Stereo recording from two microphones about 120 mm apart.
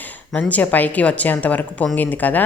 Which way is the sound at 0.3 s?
10° left (ahead or behind).